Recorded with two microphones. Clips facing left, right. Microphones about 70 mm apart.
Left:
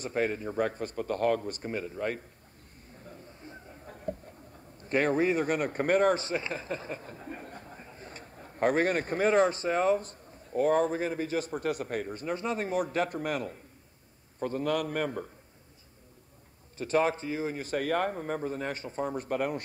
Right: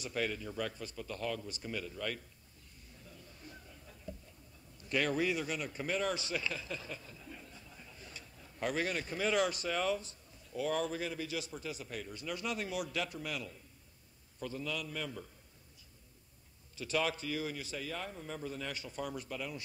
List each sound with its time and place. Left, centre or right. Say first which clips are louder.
0.0 s a man's voice: left 7 dB; left
3.0 s a sound: left 7 dB; left
4.7 s speech: left 7 dB; left
16.7 s a man's voice: left 8 dB; left
17.6 s speech: left 13 dB; left
19.2 s speech: left 11 dB; left